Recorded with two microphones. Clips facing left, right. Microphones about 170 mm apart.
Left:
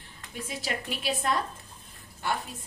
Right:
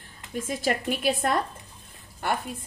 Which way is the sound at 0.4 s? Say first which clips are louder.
Right 7 dB; 50° right (ahead or behind).